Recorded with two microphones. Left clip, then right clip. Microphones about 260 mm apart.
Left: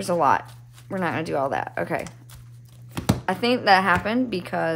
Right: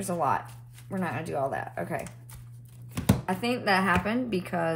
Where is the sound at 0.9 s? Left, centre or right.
Left.